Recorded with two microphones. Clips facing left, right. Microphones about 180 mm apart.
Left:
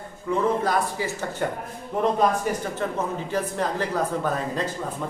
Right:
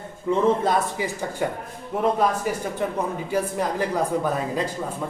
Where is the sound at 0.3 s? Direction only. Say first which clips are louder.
Right 3 dB; 20° right (ahead or behind).